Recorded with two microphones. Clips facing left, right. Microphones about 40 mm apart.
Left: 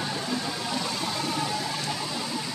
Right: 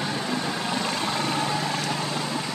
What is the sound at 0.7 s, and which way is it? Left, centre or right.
Vehicle, right.